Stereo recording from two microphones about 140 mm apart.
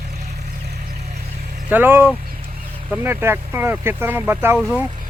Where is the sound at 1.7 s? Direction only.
15° right (ahead or behind).